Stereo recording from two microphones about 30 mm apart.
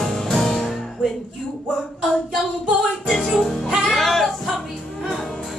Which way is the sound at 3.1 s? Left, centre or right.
Centre.